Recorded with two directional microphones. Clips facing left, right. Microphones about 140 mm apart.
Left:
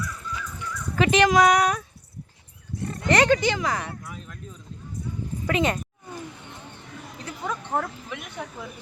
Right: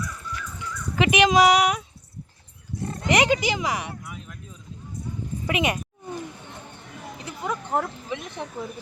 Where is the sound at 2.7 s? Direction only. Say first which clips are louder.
Even; 20° right (ahead or behind).